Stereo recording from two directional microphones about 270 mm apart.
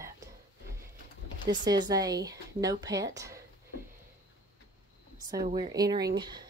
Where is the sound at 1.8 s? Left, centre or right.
Centre.